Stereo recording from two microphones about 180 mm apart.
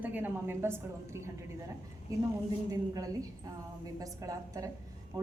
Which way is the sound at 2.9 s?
20° right (ahead or behind).